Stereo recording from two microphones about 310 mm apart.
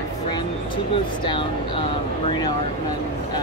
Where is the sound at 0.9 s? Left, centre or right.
Centre.